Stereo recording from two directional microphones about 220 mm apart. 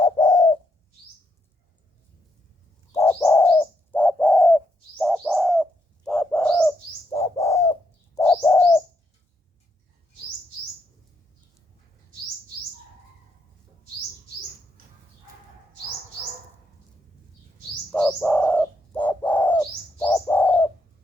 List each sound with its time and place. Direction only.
0.0 s bird: 20° left (ahead or behind)
2.9 s bird: 10° left (ahead or behind)
17.9 s bird: 5° left (ahead or behind)